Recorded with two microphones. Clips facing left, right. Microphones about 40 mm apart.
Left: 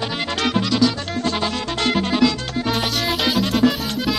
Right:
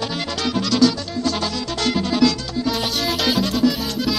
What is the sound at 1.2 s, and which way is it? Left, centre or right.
Music, left.